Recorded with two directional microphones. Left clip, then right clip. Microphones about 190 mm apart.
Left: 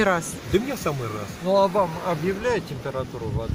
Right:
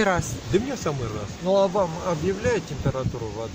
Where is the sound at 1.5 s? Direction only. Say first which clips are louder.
Left 1 dB; 15° right (ahead or behind).